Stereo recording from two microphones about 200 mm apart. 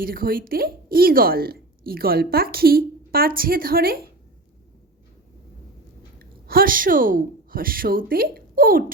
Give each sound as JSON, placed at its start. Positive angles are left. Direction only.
{"t": 0.0, "sound": "a woman's voice", "side_deg": -45}
{"t": 6.1, "sound": "a woman's voice", "side_deg": -45}